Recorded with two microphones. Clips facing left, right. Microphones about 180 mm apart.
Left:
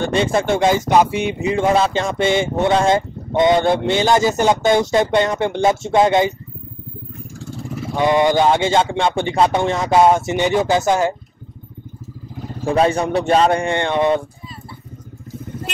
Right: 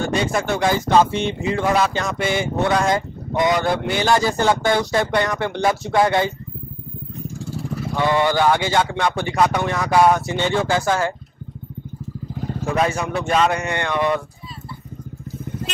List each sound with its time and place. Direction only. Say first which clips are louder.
0.0 s speech: left 3 dB; 30° left (ahead or behind)
7.8 s speech: left 4 dB; 20° left (ahead or behind)
12.6 s speech: left 5 dB; 30° left (ahead or behind)